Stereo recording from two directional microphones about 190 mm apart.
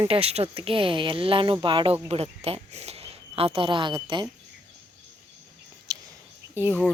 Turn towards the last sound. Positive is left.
turn(degrees=-10)  # may be behind; listen again after turning